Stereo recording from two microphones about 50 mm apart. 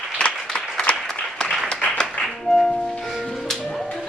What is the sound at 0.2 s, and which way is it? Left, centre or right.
Applause, left.